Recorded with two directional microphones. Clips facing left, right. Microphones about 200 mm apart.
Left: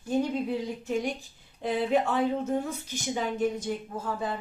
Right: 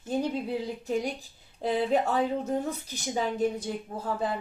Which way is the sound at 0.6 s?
35° right (ahead or behind).